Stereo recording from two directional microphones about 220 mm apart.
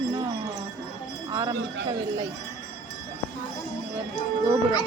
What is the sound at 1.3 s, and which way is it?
Speech, 20° right (ahead or behind).